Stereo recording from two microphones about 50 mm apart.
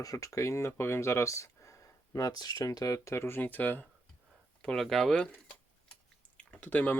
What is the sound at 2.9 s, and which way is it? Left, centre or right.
Speech, left.